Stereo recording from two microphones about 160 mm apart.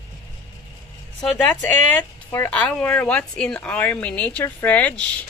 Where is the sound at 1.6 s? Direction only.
15° left (ahead or behind).